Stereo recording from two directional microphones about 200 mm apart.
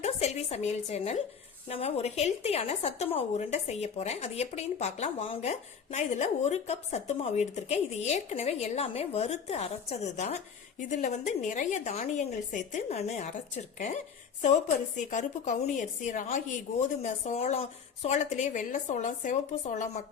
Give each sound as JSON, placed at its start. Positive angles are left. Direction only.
{"t": 0.0, "sound": "a woman's voice", "side_deg": 35}